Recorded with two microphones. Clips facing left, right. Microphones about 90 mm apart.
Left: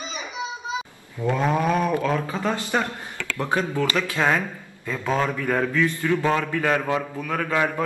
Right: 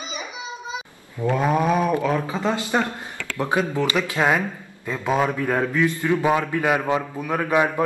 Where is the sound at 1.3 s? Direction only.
10° right (ahead or behind).